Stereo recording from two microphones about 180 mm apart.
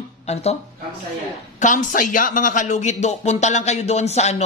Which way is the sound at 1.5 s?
45° left (ahead or behind).